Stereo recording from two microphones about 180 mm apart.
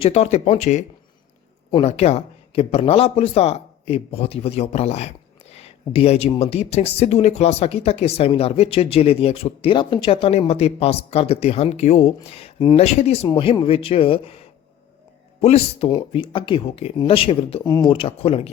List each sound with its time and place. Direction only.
0.0 s speech: 35° left (ahead or behind)